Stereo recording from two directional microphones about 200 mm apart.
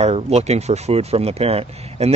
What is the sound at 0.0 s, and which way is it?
Speech, 30° right (ahead or behind).